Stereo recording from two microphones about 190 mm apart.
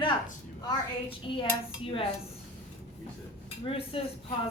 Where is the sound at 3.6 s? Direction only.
30° left (ahead or behind).